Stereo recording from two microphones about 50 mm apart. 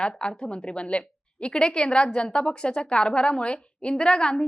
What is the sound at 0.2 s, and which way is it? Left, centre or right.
A woman's voice, centre.